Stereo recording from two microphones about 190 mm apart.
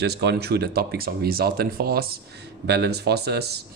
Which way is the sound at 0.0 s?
60° right (ahead or behind).